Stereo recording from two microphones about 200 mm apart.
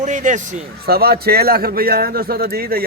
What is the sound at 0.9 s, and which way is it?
Speech, 50° right (ahead or behind).